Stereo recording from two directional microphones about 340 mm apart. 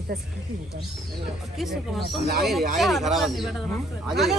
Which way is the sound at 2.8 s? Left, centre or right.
Centre.